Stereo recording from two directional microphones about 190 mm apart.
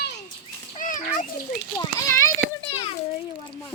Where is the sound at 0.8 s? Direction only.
45° left (ahead or behind).